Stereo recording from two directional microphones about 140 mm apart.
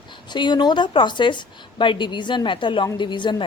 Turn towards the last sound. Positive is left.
turn(degrees=35)  # may be behind; listen again after turning